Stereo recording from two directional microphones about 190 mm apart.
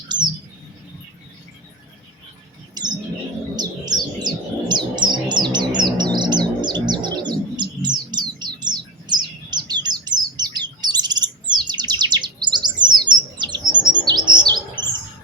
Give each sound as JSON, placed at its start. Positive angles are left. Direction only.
{"t": 2.8, "sound": "bird", "side_deg": -20}
{"t": 4.7, "sound": "chirp", "side_deg": -25}